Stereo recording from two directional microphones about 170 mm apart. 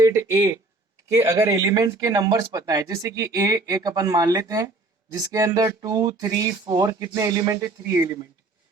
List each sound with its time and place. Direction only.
0.0 s speech: 20° right (ahead or behind)